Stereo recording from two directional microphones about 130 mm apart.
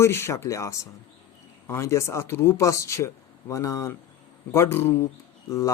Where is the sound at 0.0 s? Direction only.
20° left (ahead or behind).